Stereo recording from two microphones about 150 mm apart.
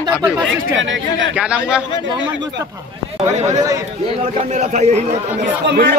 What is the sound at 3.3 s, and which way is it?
A man's voice, 50° right (ahead or behind).